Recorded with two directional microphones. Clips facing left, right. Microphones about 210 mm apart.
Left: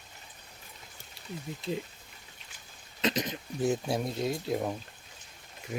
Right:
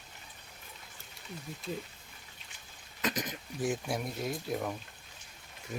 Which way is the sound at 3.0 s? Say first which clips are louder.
Left 5 dB; 25° left (ahead or behind).